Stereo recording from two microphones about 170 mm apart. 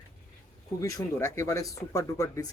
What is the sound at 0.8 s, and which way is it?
Speech, 20° left (ahead or behind).